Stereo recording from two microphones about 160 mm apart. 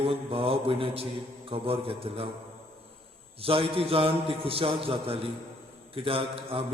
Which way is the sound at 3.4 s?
35° right (ahead or behind).